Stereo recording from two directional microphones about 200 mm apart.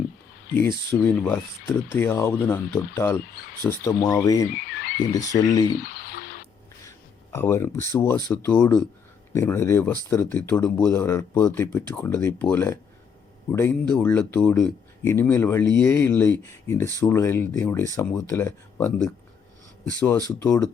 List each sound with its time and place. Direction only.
0.5 s speech: 10° left (ahead or behind)
4.8 s a sound: 45° left (ahead or behind)
5.3 s speech: 20° left (ahead or behind)
5.8 s a sound: 45° left (ahead or behind)
7.3 s speech: 10° left (ahead or behind)
20.4 s speech: 15° left (ahead or behind)